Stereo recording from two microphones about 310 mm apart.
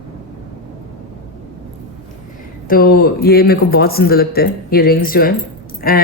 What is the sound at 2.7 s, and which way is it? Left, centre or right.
A woman's voice, left.